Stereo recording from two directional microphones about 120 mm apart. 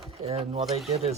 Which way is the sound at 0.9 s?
60° right (ahead or behind).